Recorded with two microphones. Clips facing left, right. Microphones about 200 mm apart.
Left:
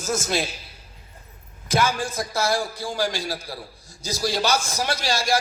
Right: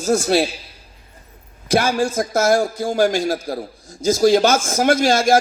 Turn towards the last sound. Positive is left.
turn(degrees=-50)  # may be behind; listen again after turning